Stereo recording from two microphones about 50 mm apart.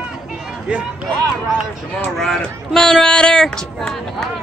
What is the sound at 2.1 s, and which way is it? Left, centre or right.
Speech, centre.